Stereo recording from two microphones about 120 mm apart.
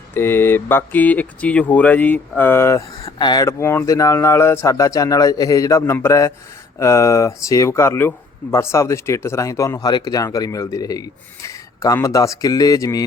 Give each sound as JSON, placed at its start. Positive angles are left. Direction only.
{"t": 0.1, "sound": "speech", "side_deg": 20}
{"t": 3.2, "sound": "speech", "side_deg": 35}
{"t": 11.4, "sound": "a sound", "side_deg": 30}
{"t": 12.0, "sound": "speech", "side_deg": 25}